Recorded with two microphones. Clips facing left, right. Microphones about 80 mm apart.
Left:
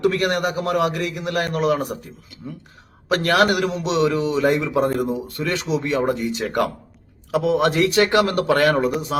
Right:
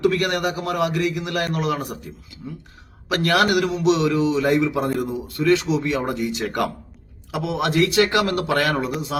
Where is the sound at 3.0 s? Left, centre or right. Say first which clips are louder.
Left 2 dB; left.